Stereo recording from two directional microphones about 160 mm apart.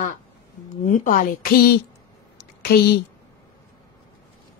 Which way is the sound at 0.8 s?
55° left (ahead or behind).